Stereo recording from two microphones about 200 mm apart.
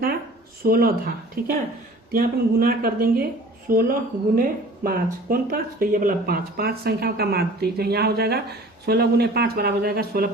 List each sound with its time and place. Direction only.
0.6 s speech: 45° right (ahead or behind)